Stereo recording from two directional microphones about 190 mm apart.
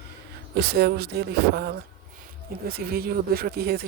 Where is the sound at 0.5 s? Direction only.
60° right (ahead or behind).